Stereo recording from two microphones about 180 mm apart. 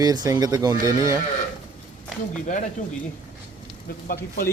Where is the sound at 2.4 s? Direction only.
45° left (ahead or behind).